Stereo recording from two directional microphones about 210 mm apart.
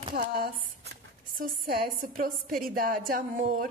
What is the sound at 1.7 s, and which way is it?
A woman's voice, 45° right (ahead or behind).